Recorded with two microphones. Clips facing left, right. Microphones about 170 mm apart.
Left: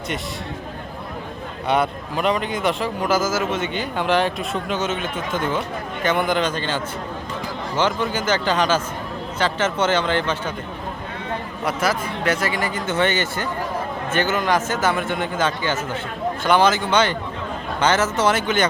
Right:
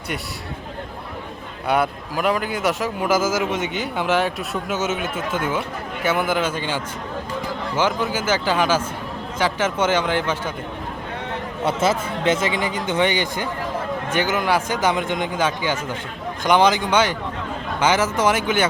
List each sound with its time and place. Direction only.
1.6 s a man's voice: 5° right (ahead or behind)
11.6 s a man's voice: 25° right (ahead or behind)